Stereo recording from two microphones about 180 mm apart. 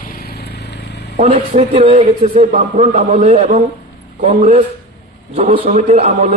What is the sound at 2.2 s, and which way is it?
A man's voice, 40° right (ahead or behind).